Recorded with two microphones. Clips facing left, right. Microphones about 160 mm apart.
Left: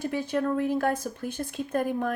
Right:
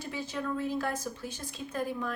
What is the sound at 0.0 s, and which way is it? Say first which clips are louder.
A woman's voice: left 8 dB; 55° left (ahead or behind).